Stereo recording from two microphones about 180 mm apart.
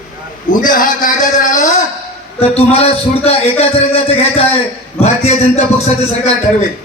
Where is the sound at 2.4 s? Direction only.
35° left (ahead or behind).